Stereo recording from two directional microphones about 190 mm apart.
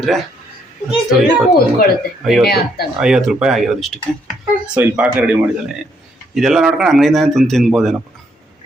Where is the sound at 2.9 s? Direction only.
5° right (ahead or behind).